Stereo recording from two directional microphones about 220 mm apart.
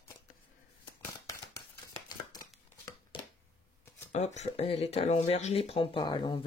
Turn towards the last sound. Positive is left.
turn(degrees=20)  # may be behind; listen again after turning